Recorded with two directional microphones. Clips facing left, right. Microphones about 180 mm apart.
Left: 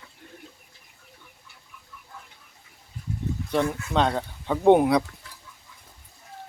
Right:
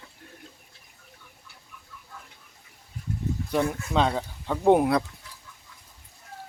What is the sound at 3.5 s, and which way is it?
Speech, 5° right (ahead or behind).